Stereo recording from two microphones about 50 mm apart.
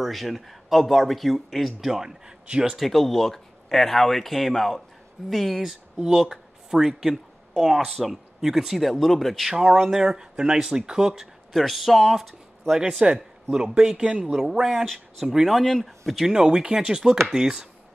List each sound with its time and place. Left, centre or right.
0.0 s speech: centre
2.7 s speech: centre
9.5 s chopping: centre
11.5 s speech: centre
13.0 s speech: centre
13.7 s chopping: centre
14.4 s speech: centre
16.1 s chopping: centre